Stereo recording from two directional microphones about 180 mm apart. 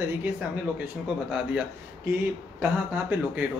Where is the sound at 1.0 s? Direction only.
5° right (ahead or behind).